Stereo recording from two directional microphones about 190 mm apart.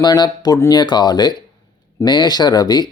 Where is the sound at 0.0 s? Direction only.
20° left (ahead or behind).